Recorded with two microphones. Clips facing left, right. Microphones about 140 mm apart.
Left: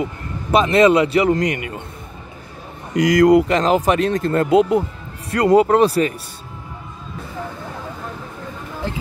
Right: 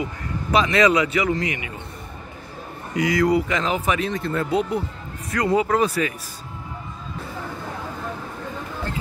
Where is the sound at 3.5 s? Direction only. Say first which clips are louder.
Left 7 dB; 35° left (ahead or behind).